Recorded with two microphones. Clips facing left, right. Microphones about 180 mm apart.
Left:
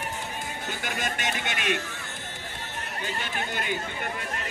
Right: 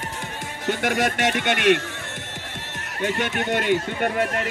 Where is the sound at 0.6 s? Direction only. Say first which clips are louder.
Right 12 dB; 70° right (ahead or behind).